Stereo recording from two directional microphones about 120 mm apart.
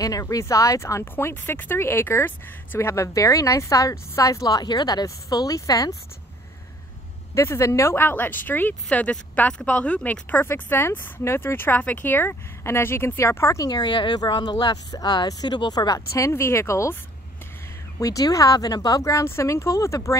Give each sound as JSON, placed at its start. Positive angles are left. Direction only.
{"t": 0.0, "sound": "speech", "side_deg": 30}
{"t": 7.3, "sound": "speech", "side_deg": 25}
{"t": 16.1, "sound": "speech", "side_deg": 20}
{"t": 17.9, "sound": "speech", "side_deg": 30}